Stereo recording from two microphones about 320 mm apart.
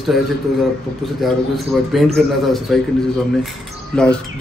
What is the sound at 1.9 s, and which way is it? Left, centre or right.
Speech, centre.